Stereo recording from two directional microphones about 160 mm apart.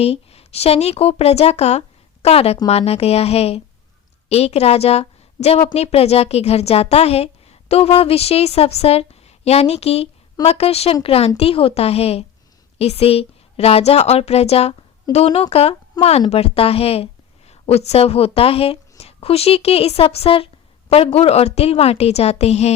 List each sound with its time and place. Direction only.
0.0 s a woman's voice: 40° left (ahead or behind)